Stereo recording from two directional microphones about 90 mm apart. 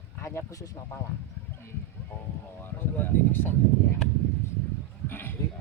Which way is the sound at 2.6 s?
25° left (ahead or behind).